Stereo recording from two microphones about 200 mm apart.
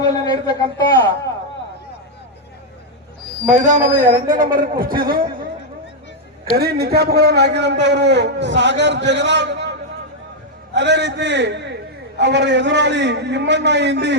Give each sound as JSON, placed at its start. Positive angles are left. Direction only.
{"t": 0.0, "sound": "a sound", "side_deg": 20}
{"t": 3.5, "sound": "a man's voice", "side_deg": -40}
{"t": 6.4, "sound": "a man's voice", "side_deg": -50}
{"t": 10.8, "sound": "a man's voice", "side_deg": -60}